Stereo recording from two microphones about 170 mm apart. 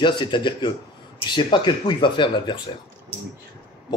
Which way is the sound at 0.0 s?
30° left (ahead or behind).